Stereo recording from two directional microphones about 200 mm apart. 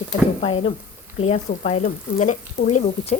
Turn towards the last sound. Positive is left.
turn(degrees=35)  # may be behind; listen again after turning